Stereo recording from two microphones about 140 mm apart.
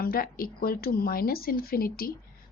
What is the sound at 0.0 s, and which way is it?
Speech, 90° left.